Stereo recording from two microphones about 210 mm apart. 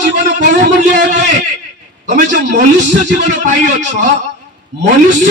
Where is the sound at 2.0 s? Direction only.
35° right (ahead or behind).